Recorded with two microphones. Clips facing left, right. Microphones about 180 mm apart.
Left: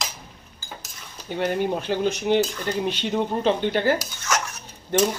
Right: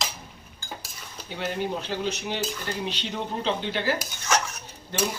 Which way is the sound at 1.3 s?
55° left (ahead or behind).